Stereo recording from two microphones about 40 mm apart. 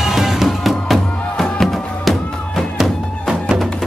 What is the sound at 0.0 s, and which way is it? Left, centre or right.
Music, centre.